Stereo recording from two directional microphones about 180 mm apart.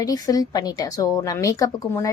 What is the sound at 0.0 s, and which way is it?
A woman's voice, 20° left (ahead or behind).